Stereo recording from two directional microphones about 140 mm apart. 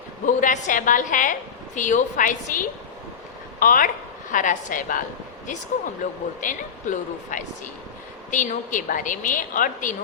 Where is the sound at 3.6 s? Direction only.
80° left.